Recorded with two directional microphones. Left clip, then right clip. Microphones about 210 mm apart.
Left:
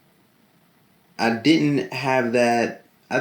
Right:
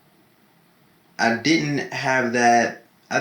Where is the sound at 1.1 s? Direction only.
50° left (ahead or behind).